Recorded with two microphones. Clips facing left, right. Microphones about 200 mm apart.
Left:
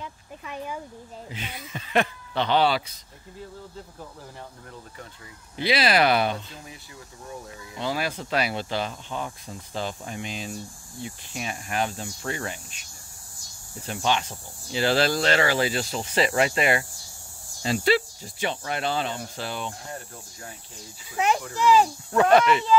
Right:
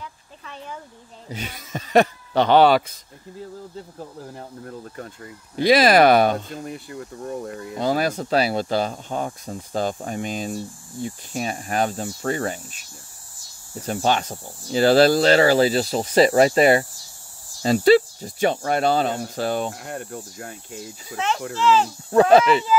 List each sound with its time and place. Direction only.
0.0 s a sound: 10° left (ahead or behind)
1.3 s speech: 45° right (ahead or behind)
4.4 s speech: 50° right (ahead or behind)
19.7 s speech: 70° right (ahead or behind); by 20.5 s 55° right (ahead or behind)
21.5 s speech: 15° left (ahead or behind)
22.1 s speech: 30° right (ahead or behind)
22.7 s speech: 5° right (ahead or behind)